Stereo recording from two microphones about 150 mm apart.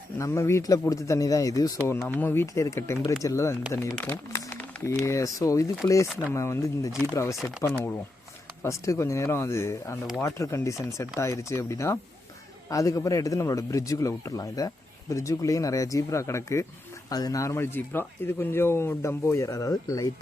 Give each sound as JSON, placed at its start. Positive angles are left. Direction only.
{"t": 0.2, "sound": "speech", "side_deg": 20}
{"t": 2.0, "sound": "speech", "side_deg": 15}
{"t": 3.9, "sound": "speech", "side_deg": 10}
{"t": 4.9, "sound": "speech", "side_deg": 20}